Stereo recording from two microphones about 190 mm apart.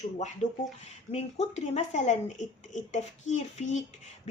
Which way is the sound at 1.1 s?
35° left (ahead or behind).